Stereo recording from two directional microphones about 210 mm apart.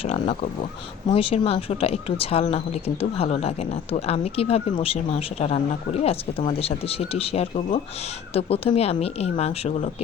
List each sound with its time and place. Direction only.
0.0 s speech: 30° left (ahead or behind)